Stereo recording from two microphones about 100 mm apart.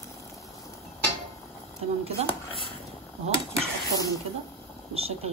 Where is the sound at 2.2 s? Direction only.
90° right.